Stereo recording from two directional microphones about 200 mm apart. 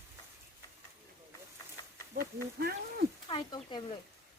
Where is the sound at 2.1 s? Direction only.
50° right (ahead or behind).